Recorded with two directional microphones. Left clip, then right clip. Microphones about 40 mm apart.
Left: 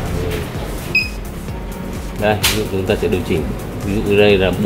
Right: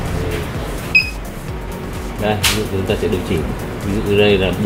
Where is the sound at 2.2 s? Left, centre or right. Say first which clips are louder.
Left 1 dB; left.